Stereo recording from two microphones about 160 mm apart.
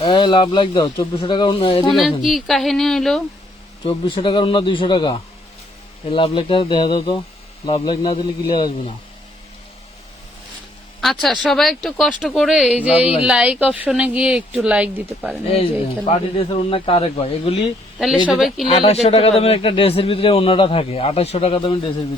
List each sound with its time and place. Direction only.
0.0 s speech: 25° left (ahead or behind)
1.9 s speech: centre (ahead or behind)
3.8 s speech: 30° left (ahead or behind)
11.0 s speech: centre (ahead or behind)
12.9 s speech: 40° left (ahead or behind)
13.2 s speech: 5° right (ahead or behind)
16.0 s speech: 40° left (ahead or behind)
18.3 s speech: centre (ahead or behind)
18.7 s speech: 35° left (ahead or behind)